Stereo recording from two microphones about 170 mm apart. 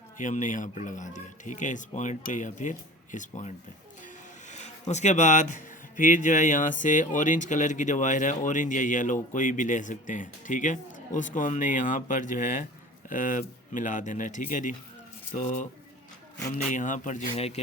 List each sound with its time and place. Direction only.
0.2 s speech: 50° left (ahead or behind)
4.5 s speech: 40° left (ahead or behind)
16.7 s speech: 50° left (ahead or behind)